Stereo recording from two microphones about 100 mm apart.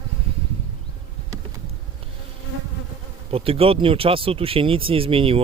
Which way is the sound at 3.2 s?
70° right (ahead or behind).